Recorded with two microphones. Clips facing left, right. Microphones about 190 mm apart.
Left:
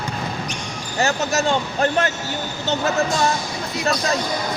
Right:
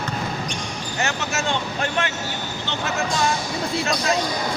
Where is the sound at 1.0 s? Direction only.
35° left (ahead or behind).